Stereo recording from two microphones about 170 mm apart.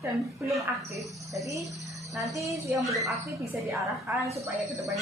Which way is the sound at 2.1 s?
Centre (ahead or behind).